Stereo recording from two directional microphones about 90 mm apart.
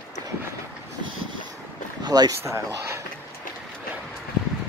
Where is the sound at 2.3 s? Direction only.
30° right (ahead or behind).